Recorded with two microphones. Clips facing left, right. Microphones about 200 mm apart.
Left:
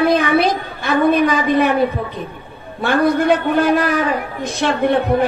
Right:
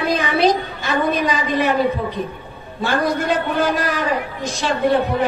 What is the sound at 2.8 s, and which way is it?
A woman's voice, 60° left (ahead or behind).